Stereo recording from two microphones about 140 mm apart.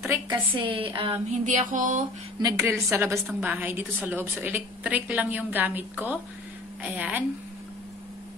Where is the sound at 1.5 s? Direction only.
65° right (ahead or behind).